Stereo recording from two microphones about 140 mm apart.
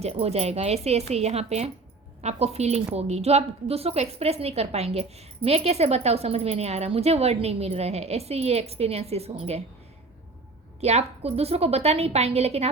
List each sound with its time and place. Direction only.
0.0 s a woman's voice: 45° right (ahead or behind)
10.8 s a woman's voice: 50° right (ahead or behind)